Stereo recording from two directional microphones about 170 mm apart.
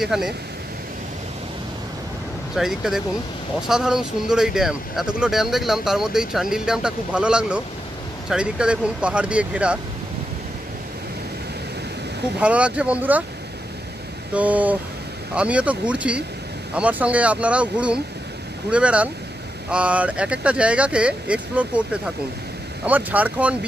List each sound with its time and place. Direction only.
0.0 s speech: centre (ahead or behind)
2.5 s speech: centre (ahead or behind)
12.4 s speech: 5° right (ahead or behind)
14.3 s speech: 10° right (ahead or behind)